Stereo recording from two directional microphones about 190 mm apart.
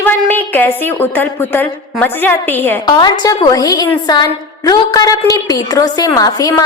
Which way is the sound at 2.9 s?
20° left (ahead or behind).